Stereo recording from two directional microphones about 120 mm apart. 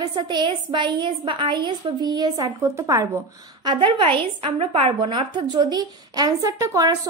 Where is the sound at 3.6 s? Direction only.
40° right (ahead or behind).